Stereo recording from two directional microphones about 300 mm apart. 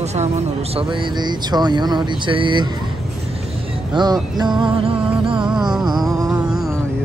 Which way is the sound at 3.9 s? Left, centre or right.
Centre.